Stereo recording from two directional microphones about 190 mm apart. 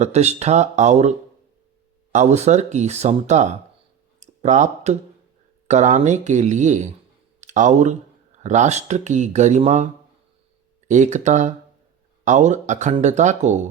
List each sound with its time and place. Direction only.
0.0 s speech: 35° right (ahead or behind)
2.1 s speech: 35° right (ahead or behind)
4.2 s a sound: 40° right (ahead or behind)
5.6 s speech: 40° right (ahead or behind)